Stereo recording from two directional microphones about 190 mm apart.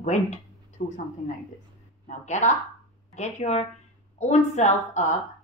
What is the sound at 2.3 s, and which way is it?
A woman's voice, 40° left (ahead or behind).